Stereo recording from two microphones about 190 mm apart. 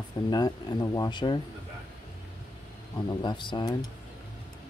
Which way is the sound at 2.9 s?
25° left (ahead or behind).